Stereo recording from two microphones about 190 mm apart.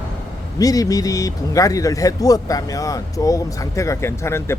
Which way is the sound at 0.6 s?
20° left (ahead or behind).